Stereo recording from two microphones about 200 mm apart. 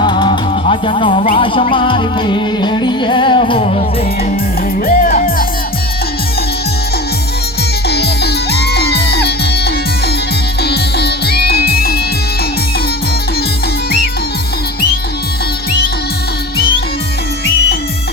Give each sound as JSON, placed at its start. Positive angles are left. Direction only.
{"t": 0.0, "sound": "music", "side_deg": 25}
{"t": 4.9, "sound": "music", "side_deg": 45}
{"t": 7.9, "sound": "music", "side_deg": 55}